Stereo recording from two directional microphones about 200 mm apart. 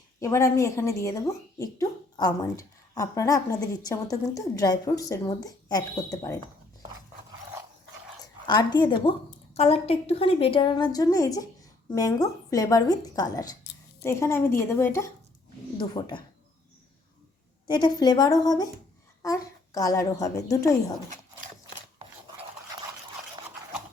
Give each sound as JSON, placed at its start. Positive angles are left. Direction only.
{"t": 0.2, "sound": "a woman's voice", "side_deg": 15}
{"t": 8.4, "sound": "a woman's voice", "side_deg": 20}
{"t": 17.7, "sound": "a woman's voice", "side_deg": 20}